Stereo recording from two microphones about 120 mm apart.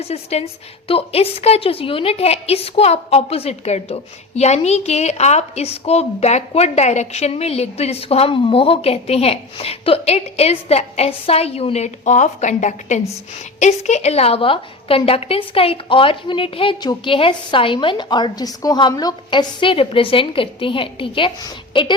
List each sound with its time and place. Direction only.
0.0 s a woman's voice: 60° left (ahead or behind); by 13.0 s 90° left
13.6 s a woman's voice: 75° left (ahead or behind); by 21.9 s 40° left (ahead or behind)